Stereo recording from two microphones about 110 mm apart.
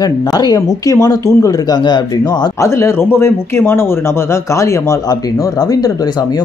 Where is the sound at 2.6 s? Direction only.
25° left (ahead or behind).